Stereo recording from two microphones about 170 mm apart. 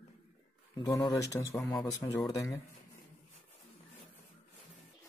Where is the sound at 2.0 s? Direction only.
20° left (ahead or behind).